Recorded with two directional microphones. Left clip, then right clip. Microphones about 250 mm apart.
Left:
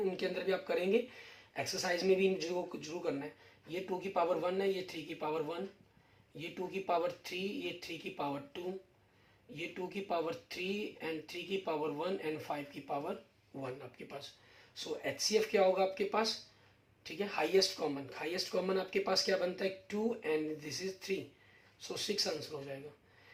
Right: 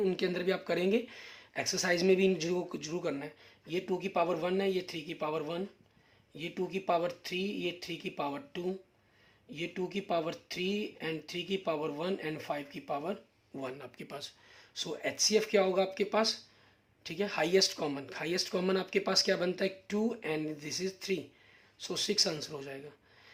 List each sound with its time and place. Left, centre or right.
0.0 s speech: right